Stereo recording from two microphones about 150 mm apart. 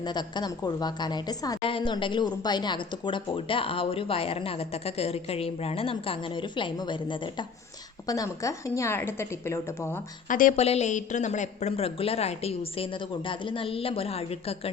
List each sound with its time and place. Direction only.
0.0 s a woman's voice: 30° left (ahead or behind)
10.2 s speech: 65° left (ahead or behind)
10.5 s a woman's voice: 45° left (ahead or behind)